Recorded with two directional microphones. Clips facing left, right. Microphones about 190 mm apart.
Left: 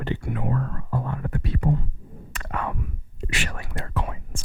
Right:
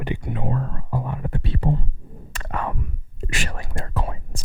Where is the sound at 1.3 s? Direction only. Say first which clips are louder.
Even; 25° right (ahead or behind).